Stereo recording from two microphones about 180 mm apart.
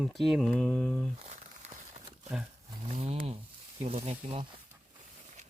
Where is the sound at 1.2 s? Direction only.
40° right (ahead or behind).